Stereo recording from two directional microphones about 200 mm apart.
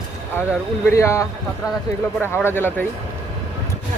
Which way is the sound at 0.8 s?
15° left (ahead or behind).